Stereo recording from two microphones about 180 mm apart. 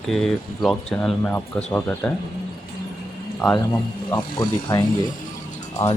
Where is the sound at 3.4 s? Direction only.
Centre (ahead or behind).